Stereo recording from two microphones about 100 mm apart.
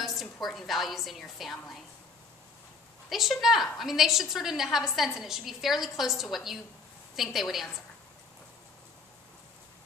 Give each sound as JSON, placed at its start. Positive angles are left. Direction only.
{"t": 0.0, "sound": "a woman's voice", "side_deg": 0}
{"t": 3.1, "sound": "a woman's voice", "side_deg": 0}